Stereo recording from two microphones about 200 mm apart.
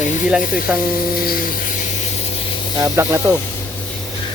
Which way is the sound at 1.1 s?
50° left (ahead or behind).